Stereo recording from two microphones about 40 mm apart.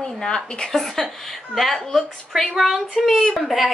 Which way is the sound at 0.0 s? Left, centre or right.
Centre.